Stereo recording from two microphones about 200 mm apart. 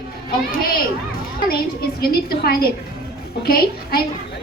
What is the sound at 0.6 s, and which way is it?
A woman's voice, 45° left (ahead or behind).